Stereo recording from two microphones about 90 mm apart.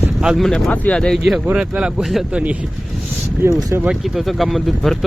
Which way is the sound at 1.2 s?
5° right (ahead or behind).